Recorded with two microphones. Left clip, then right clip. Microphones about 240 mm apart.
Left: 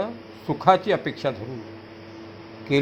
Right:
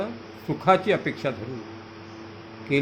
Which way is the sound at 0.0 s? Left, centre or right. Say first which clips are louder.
Left 2 dB; centre.